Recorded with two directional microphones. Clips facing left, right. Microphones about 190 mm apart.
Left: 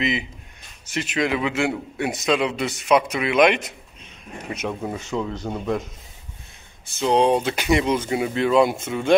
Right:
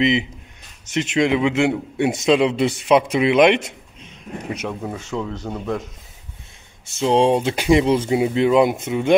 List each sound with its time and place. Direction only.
0.9 s a man's voice: 25° right (ahead or behind)
4.6 s speech: 5° left (ahead or behind)
6.9 s a man's voice: 25° right (ahead or behind)